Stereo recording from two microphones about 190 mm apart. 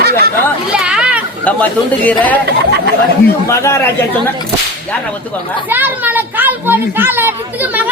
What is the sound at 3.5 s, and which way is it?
Speech, 15° left (ahead or behind).